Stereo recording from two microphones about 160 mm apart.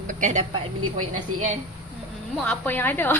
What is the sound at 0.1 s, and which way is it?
Speech, 50° right (ahead or behind).